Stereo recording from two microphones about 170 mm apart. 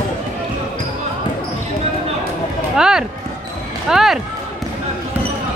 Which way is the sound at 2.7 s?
5° right (ahead or behind).